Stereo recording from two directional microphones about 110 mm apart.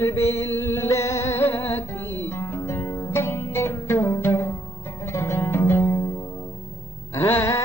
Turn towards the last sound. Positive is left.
turn(degrees=25)  # may be behind; listen again after turning